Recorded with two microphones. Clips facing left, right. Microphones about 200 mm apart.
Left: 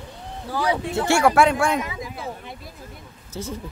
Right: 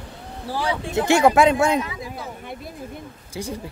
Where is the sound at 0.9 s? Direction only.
20° right (ahead or behind).